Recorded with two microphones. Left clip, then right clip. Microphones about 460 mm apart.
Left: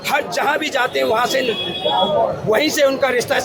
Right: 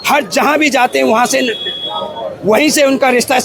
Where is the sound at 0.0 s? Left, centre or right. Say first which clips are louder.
Right 6 dB; right.